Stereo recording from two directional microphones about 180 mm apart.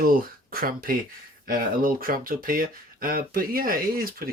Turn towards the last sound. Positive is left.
turn(degrees=-55)  # may be behind; listen again after turning